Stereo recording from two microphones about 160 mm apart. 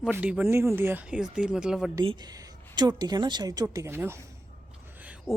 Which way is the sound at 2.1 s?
25° right (ahead or behind).